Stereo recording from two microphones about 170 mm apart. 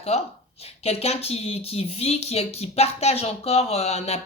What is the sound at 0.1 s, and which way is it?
A woman's voice, 35° left (ahead or behind).